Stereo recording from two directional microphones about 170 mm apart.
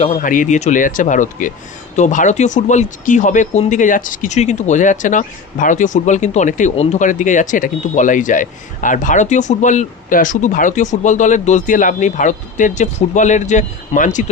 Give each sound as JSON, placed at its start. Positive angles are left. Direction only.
{"t": 0.2, "sound": "speech", "side_deg": 50}